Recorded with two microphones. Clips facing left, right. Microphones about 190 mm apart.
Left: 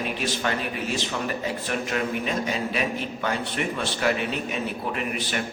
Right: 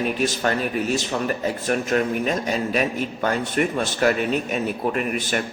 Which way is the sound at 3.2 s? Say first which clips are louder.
Right 6 dB; 45° right (ahead or behind).